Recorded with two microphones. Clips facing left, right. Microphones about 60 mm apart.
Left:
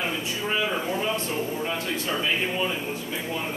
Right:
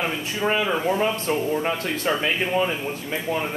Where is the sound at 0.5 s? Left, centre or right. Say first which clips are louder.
Right 5 dB; right.